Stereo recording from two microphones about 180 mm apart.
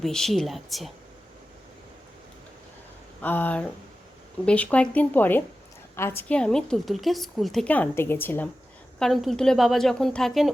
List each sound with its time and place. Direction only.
0.0 s a woman's voice: centre (ahead or behind)
3.2 s a woman's voice: 10° left (ahead or behind)
9.0 s a woman's voice: centre (ahead or behind)